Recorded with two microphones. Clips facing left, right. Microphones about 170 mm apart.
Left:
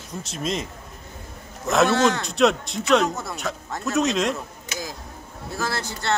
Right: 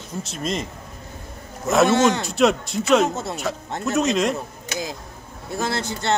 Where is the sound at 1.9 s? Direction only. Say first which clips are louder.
Right 2 dB; 20° right (ahead or behind).